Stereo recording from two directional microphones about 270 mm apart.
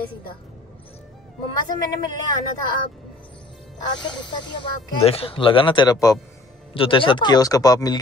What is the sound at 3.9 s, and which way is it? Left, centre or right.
A woman's voice, centre.